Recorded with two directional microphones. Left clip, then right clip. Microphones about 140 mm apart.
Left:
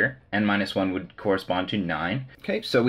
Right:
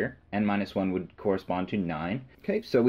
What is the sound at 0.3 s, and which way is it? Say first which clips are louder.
Speech: left 5 dB; 35° right (ahead or behind).